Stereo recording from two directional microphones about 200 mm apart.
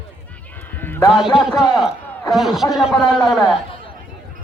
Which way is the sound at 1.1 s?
Centre (ahead or behind).